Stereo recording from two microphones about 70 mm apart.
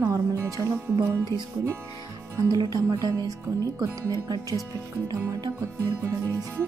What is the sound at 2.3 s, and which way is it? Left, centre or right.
Speech, right.